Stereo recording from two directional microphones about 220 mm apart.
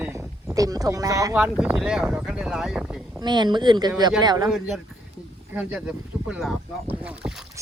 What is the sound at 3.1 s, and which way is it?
Speech, 20° right (ahead or behind).